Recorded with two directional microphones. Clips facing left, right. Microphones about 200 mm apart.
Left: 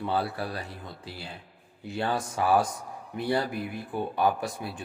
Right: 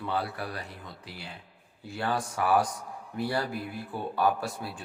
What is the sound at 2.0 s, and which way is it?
Speech, 25° left (ahead or behind).